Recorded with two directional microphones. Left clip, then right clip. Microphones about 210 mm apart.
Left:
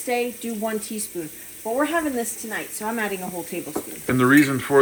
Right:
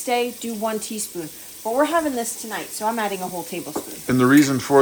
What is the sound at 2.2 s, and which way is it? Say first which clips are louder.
Speech: right 1 dB; centre (ahead or behind).